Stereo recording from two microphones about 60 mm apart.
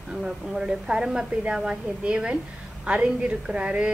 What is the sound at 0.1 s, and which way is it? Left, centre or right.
A woman's voice, centre.